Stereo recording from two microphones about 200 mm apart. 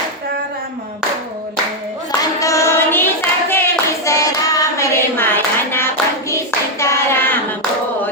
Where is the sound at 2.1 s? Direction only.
15° left (ahead or behind).